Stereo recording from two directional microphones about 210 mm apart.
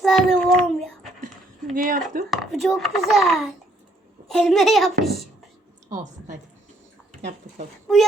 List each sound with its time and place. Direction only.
0.0 s child singing: centre (ahead or behind)
1.2 s a sound: 40° right (ahead or behind)
2.3 s a child's voice: centre (ahead or behind)
5.9 s a woman's voice: 35° right (ahead or behind)